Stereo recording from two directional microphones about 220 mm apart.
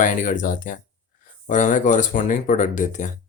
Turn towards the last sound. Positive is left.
turn(degrees=35)  # may be behind; listen again after turning